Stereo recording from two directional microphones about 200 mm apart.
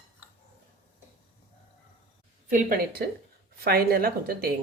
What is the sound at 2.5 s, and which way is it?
A woman's voice, 40° right (ahead or behind).